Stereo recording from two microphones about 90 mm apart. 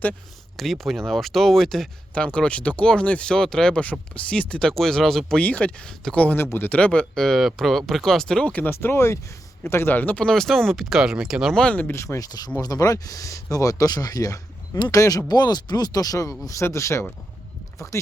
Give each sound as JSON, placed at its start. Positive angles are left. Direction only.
{"t": 0.1, "sound": "speech", "side_deg": 0}
{"t": 5.4, "sound": "speech", "side_deg": 15}
{"t": 6.7, "sound": "speech", "side_deg": 15}
{"t": 10.2, "sound": "speech", "side_deg": 5}
{"t": 11.5, "sound": "speech", "side_deg": 15}
{"t": 11.9, "sound": "speech", "side_deg": 35}
{"t": 15.3, "sound": "speech", "side_deg": 50}